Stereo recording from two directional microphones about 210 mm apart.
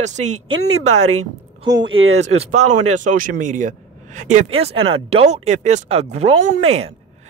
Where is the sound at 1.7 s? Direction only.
65° right (ahead or behind).